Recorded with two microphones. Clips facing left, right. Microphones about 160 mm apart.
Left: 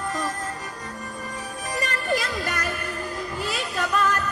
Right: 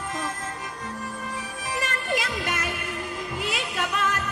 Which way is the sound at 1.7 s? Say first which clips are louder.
Left 2 dB; 35° left (ahead or behind).